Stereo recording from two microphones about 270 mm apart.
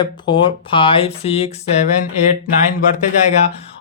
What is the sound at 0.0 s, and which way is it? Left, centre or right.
Speech, centre.